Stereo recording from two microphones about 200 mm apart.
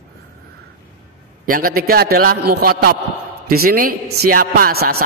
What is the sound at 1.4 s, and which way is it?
A man's voice, 45° right (ahead or behind).